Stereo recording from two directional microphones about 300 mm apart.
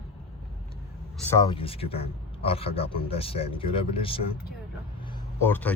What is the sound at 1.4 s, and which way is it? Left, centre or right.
Speech, centre.